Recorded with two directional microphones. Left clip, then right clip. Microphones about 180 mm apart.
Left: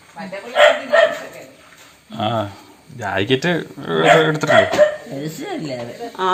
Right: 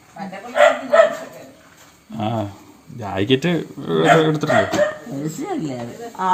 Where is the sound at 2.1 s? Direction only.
5° right (ahead or behind).